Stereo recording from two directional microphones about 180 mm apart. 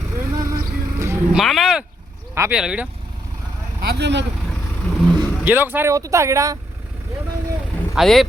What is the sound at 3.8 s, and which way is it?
Speech, 70° right (ahead or behind).